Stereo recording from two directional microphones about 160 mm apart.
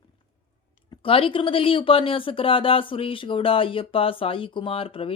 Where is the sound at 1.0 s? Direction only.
35° left (ahead or behind).